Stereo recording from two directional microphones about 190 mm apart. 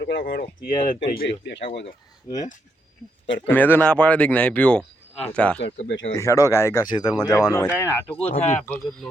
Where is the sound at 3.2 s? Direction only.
70° left (ahead or behind).